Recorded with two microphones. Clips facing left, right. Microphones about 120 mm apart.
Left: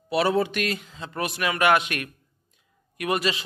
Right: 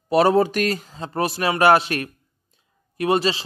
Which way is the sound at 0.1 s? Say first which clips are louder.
Right 6 dB; 40° right (ahead or behind).